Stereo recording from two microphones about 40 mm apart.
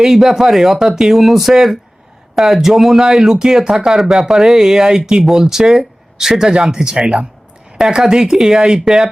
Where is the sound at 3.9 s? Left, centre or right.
Centre.